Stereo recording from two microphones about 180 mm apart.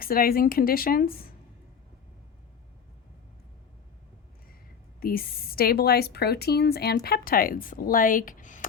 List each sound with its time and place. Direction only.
0.0 s a woman's voice: 55° left (ahead or behind)
4.9 s a woman's voice: 55° left (ahead or behind)